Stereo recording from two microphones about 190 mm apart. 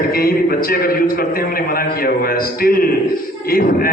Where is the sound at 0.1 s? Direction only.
50° left (ahead or behind).